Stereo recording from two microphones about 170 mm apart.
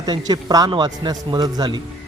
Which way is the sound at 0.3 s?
20° right (ahead or behind).